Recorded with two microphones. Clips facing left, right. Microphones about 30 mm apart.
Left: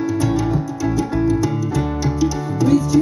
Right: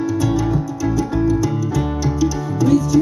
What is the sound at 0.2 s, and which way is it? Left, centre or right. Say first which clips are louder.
Music: even; centre.